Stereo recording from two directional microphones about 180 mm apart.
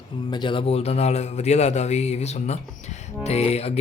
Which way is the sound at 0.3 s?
25° left (ahead or behind).